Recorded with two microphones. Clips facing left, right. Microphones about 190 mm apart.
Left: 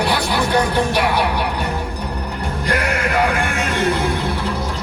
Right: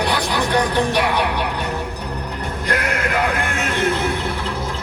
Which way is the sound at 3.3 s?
10° left (ahead or behind).